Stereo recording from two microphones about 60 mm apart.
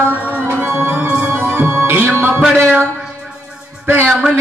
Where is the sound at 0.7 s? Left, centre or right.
Right.